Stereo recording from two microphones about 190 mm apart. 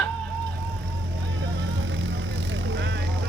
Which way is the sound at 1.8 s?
75° right (ahead or behind).